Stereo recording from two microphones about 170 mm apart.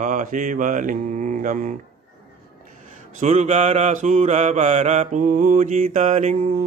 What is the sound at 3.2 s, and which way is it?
Mantra, 45° right (ahead or behind).